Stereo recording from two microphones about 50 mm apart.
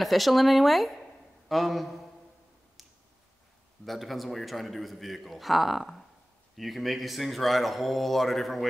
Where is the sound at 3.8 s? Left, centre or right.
Centre.